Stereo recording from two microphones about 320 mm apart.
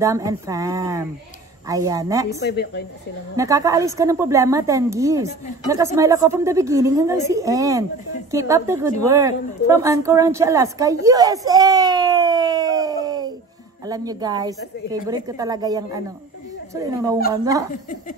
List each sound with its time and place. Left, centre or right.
0.0 s a woman's voice: centre
2.4 s speech: left
3.3 s a woman's voice: centre